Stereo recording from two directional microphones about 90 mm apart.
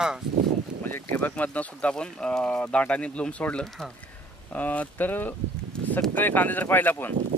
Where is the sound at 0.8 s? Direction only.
20° left (ahead or behind).